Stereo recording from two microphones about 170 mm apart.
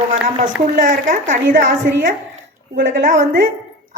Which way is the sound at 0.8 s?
50° right (ahead or behind).